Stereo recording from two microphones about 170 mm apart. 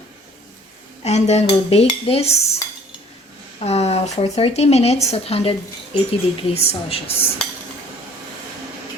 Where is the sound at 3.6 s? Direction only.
40° left (ahead or behind).